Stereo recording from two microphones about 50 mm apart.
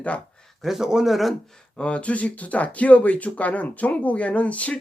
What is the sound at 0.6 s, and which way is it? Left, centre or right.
Speech, centre.